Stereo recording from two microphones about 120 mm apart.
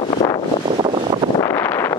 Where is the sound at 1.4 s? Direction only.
25° left (ahead or behind).